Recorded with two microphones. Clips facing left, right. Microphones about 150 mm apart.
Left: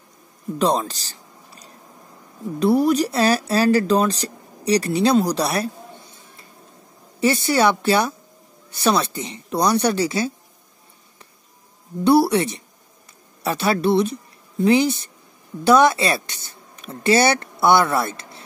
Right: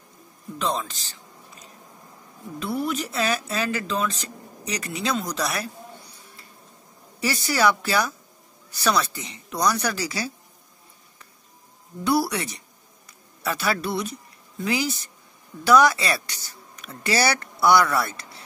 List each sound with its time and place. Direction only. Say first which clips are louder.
0.6 s speech: left 7 dB; 40° left (ahead or behind)
7.2 s a woman's voice: left 6 dB; 25° left (ahead or behind)
12.0 s a woman's voice: left 8 dB; 30° left (ahead or behind)